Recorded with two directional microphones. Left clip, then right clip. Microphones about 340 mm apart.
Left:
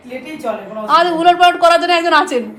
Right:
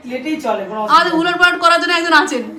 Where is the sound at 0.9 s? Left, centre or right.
Centre.